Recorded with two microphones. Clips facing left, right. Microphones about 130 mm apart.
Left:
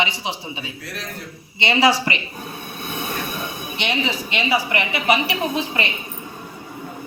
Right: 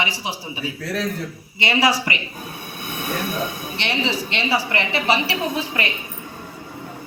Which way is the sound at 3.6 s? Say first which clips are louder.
Even; 15° left (ahead or behind).